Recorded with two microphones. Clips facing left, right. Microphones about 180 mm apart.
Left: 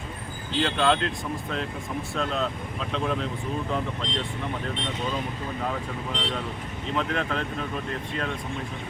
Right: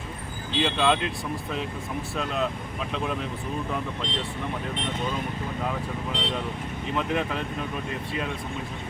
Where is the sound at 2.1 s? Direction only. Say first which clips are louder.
Even; 5° right (ahead or behind).